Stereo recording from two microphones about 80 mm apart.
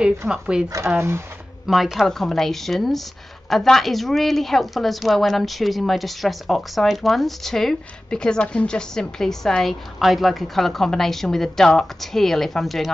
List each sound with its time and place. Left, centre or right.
0.3 s speech: centre
0.8 s speech: right
1.7 s a woman's voice: centre